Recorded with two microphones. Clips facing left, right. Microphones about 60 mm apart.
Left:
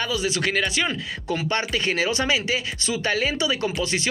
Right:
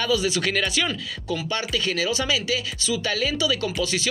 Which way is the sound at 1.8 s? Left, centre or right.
Left.